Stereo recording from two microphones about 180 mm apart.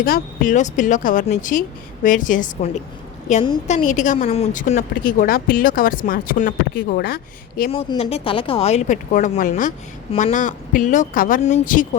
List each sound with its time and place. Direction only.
0.0 s speech: 50° left (ahead or behind)
3.7 s speech: 40° left (ahead or behind)
7.7 s speech: 35° left (ahead or behind)
10.1 s speech: 30° left (ahead or behind)
10.3 s speech: 45° left (ahead or behind)